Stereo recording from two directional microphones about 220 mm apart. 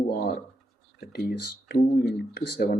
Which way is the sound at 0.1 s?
45° left (ahead or behind).